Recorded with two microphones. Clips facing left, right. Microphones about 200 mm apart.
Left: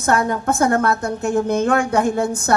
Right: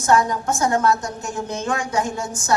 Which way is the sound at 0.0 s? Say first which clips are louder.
Even; 60° left (ahead or behind).